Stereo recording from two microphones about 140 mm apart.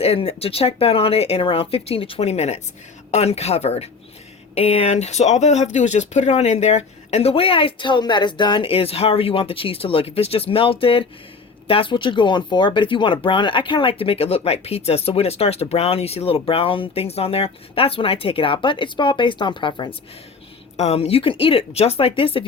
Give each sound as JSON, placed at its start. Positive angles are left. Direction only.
{"t": 0.0, "sound": "speech", "side_deg": 45}
{"t": 20.7, "sound": "speech", "side_deg": 50}